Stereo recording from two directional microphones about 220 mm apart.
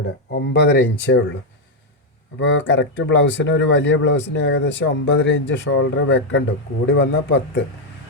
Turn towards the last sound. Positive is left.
turn(degrees=50)  # may be behind; listen again after turning